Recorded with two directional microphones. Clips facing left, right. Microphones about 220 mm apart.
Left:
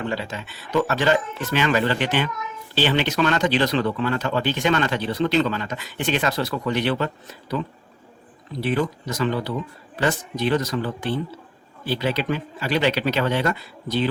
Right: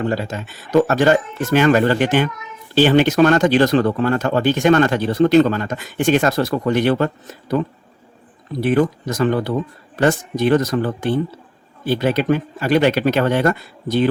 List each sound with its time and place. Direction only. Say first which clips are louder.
0.0 s speech: right 6 dB; 45° right (ahead or behind)
8.6 s speech: right 7 dB; 50° right (ahead or behind)